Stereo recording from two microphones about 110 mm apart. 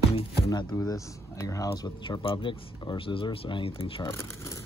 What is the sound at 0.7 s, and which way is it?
Speech, 30° left (ahead or behind).